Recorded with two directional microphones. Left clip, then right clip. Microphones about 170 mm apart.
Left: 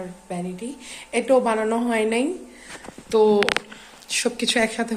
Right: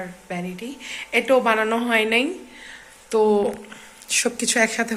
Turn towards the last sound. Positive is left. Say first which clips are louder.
# right 1 dB
turn(degrees=10)  # may be behind; listen again after turning